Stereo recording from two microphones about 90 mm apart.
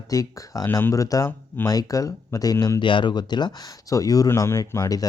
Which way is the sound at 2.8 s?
65° left (ahead or behind).